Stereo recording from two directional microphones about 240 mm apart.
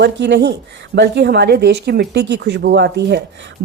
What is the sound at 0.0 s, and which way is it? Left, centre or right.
A woman's voice, right.